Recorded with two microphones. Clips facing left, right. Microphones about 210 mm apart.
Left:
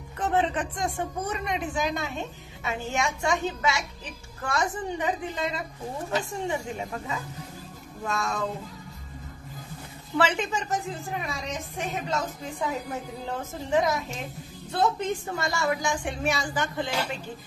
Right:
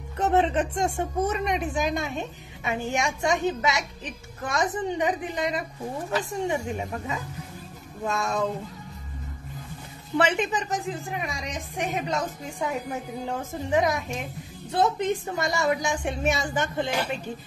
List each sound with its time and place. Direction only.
0.2 s speech: 25° right (ahead or behind)
8.1 s a woman's voice: 20° right (ahead or behind)
10.1 s a woman's voice: 20° right (ahead or behind)
13.7 s a woman's voice: 15° right (ahead or behind)